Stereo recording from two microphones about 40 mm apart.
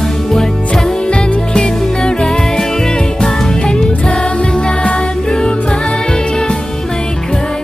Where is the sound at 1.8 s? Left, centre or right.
Centre.